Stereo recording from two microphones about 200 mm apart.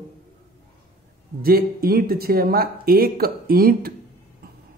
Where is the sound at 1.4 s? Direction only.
50° right (ahead or behind).